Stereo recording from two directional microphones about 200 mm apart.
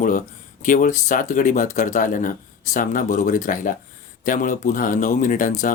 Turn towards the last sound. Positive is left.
turn(degrees=40)  # may be behind; listen again after turning